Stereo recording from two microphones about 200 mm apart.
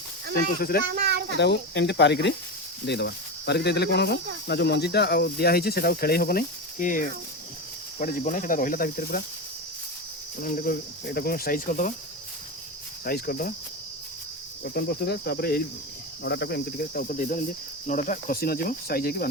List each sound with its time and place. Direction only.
0.3 s speech: 50° left (ahead or behind)
0.9 s speech: 50° right (ahead or behind)
1.4 s speech: 60° left (ahead or behind)
10.4 s speech: 45° left (ahead or behind)
13.1 s speech: 50° left (ahead or behind)
14.6 s speech: 50° left (ahead or behind)